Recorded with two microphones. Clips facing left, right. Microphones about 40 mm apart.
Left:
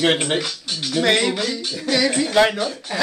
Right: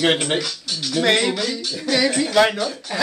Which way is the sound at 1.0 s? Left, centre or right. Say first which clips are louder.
Even; centre.